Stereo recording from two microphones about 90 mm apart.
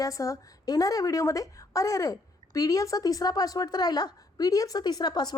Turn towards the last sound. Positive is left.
turn(degrees=50)  # may be behind; listen again after turning